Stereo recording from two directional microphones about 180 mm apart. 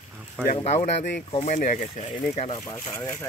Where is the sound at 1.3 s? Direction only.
40° left (ahead or behind).